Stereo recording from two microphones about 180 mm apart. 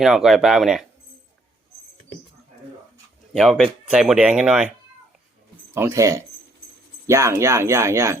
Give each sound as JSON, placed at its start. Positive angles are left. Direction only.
{"t": 0.0, "sound": "speech", "side_deg": 0}
{"t": 3.3, "sound": "speech", "side_deg": 0}
{"t": 5.7, "sound": "speech", "side_deg": -15}